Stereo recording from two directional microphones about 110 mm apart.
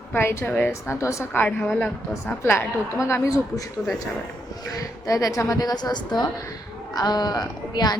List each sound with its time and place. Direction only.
0.1 s a woman's voice: 20° left (ahead or behind)
4.8 s a woman's voice: 30° left (ahead or behind)